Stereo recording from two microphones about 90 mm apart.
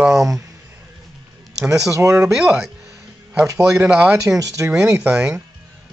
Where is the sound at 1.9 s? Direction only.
35° right (ahead or behind).